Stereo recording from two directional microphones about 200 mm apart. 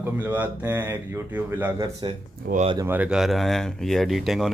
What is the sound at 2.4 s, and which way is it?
Speech, 40° right (ahead or behind).